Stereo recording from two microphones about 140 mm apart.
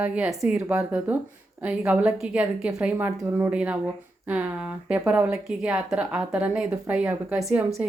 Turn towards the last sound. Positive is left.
turn(degrees=-5)  # may be behind; listen again after turning